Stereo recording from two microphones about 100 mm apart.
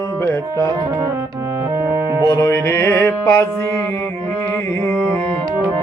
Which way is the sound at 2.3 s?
30° left (ahead or behind).